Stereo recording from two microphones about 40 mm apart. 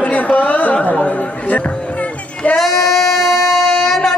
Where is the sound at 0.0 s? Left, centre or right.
Left.